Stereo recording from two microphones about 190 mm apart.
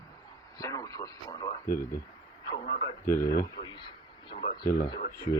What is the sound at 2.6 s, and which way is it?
Radio, 50° left (ahead or behind).